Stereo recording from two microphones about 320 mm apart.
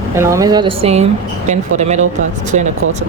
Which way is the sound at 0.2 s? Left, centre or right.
Centre.